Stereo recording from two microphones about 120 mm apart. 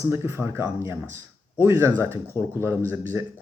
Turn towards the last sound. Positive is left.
turn(degrees=-20)  # may be behind; listen again after turning